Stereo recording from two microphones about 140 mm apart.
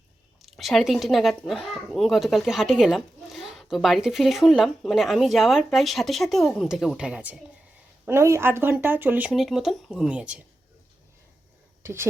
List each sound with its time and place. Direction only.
0.4 s speech: centre (ahead or behind)
9.3 s speech: centre (ahead or behind)
11.8 s speech: 20° right (ahead or behind)